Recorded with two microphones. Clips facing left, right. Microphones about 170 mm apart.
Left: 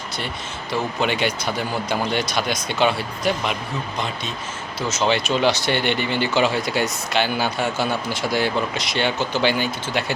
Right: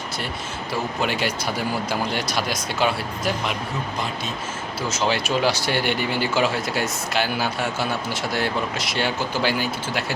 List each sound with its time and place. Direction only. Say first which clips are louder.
1.0 s speech: left 3 dB; 5° right (ahead or behind)
4.9 s speech: left 3 dB; 10° right (ahead or behind)